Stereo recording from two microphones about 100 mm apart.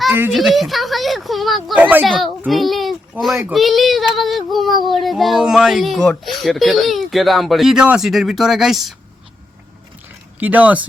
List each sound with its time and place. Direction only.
0.3 s speech: centre (ahead or behind)
1.7 s speech: 15° right (ahead or behind)
2.0 s speech: centre (ahead or behind)
2.5 s a sound: centre (ahead or behind)
3.5 s speech: centre (ahead or behind)
10.4 s speech: 15° right (ahead or behind)